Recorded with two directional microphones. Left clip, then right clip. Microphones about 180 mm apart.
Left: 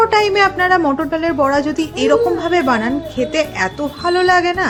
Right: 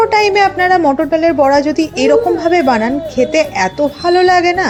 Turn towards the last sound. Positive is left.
turn(degrees=-15)  # may be behind; listen again after turning